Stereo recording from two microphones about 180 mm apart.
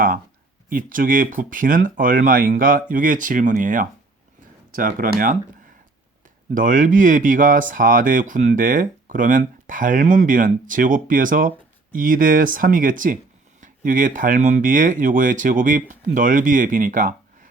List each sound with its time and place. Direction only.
0.7 s speech: 50° right (ahead or behind)
6.5 s speech: 45° right (ahead or behind)